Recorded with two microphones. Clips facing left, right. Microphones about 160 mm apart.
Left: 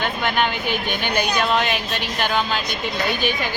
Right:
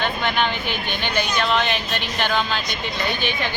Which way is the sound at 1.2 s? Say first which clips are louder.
Left 1 dB; 5° left (ahead or behind).